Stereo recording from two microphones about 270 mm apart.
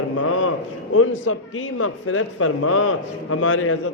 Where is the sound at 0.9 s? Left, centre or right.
Left.